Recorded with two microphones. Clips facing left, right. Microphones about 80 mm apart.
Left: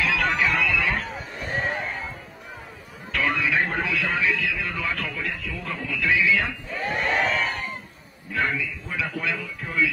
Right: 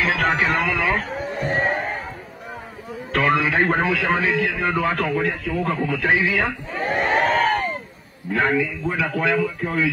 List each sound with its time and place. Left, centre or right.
0.0 s a sound: right
3.1 s a man's voice: right
9.1 s speech: right